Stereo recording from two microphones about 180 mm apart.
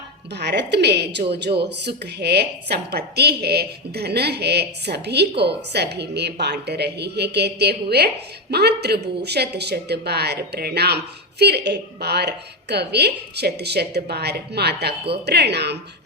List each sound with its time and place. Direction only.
0.3 s a woman's voice: 70° right (ahead or behind)